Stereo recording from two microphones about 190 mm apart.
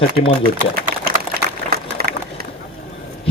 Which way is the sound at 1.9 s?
55° right (ahead or behind).